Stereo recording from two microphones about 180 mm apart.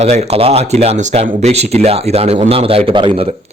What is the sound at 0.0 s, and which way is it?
Speech, 35° right (ahead or behind).